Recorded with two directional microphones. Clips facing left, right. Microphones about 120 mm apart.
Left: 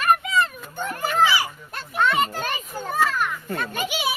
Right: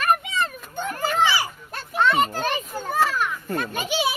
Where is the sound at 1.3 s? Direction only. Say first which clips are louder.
Left 1 dB; 30° right (ahead or behind).